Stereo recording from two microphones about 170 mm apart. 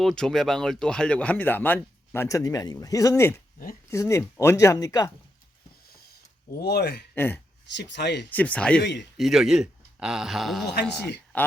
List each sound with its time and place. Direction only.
0.0 s speech: centre (ahead or behind); by 5.1 s 20° left (ahead or behind)
6.6 s speech: 70° left (ahead or behind)
7.2 s speech: 10° left (ahead or behind)
7.8 s speech: 90° left
8.3 s speech: 10° left (ahead or behind)
8.8 s speech: 90° left
9.1 s speech: centre (ahead or behind)